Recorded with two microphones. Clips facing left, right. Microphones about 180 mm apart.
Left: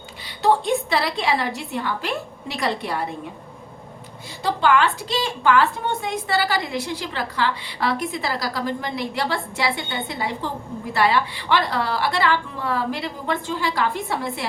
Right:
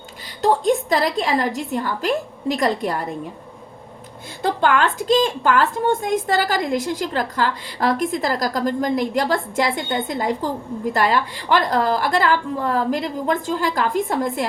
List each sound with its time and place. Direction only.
0.4 s a woman's voice: 45° right (ahead or behind)
4.4 s a woman's voice: 50° right (ahead or behind)